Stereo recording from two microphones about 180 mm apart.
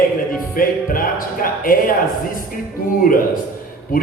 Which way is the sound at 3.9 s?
50° left (ahead or behind).